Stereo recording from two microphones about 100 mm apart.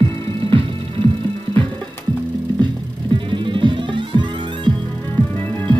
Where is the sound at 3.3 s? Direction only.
55° right (ahead or behind).